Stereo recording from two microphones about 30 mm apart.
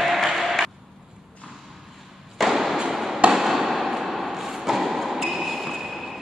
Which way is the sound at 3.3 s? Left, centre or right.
Centre.